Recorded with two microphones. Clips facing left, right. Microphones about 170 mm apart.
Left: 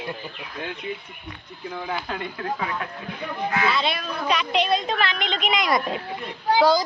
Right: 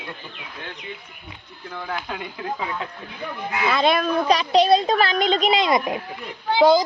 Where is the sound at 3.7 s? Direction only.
50° right (ahead or behind).